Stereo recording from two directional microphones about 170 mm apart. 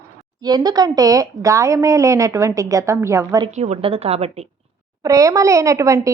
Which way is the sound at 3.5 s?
40° right (ahead or behind).